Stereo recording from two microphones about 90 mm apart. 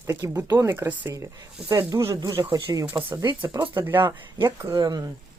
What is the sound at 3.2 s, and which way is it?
Speech, 50° right (ahead or behind).